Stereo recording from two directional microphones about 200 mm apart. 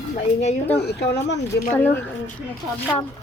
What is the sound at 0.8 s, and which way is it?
Speech, 55° left (ahead or behind).